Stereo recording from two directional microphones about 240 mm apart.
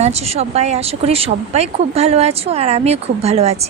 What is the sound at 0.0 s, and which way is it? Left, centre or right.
Speech, right.